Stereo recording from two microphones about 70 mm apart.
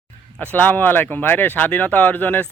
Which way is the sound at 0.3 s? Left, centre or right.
Left.